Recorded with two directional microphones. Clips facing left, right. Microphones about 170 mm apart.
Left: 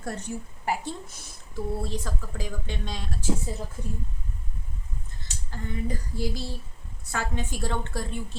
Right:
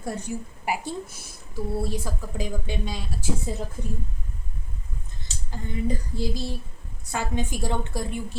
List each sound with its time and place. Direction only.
0.0 s speech: 10° right (ahead or behind)
5.2 s a sound: 20° right (ahead or behind)
7.0 s speech: 15° right (ahead or behind)